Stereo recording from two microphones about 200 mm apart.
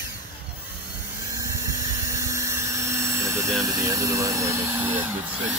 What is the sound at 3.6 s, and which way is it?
Speech, 15° right (ahead or behind).